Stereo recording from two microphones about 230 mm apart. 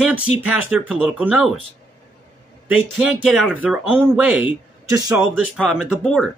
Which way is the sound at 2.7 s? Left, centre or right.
Centre.